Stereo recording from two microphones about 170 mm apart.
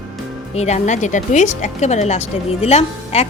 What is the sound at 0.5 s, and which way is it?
Speech, 40° left (ahead or behind).